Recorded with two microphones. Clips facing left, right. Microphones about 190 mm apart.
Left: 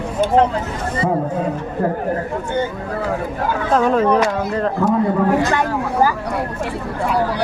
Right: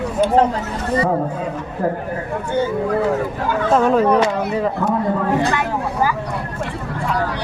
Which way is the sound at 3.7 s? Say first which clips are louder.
Even; 5° right (ahead or behind).